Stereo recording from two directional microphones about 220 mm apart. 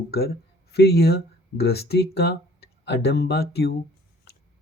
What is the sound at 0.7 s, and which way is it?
Speech, 45° left (ahead or behind).